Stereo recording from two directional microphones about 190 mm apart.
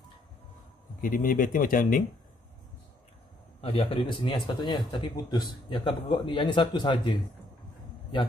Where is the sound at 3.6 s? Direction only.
30° left (ahead or behind).